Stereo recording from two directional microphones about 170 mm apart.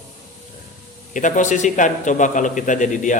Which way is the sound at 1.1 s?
50° left (ahead or behind).